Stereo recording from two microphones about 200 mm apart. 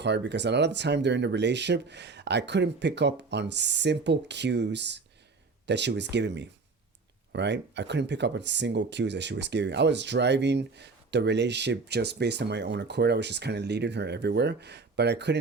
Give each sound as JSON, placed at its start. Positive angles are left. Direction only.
{"t": 0.0, "sound": "speech", "side_deg": -60}